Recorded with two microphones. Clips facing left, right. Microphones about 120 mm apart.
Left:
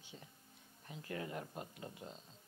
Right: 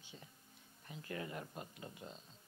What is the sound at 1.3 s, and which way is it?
Speech, 25° left (ahead or behind).